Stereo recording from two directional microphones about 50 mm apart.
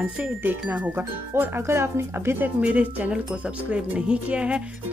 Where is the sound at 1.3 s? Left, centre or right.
Right.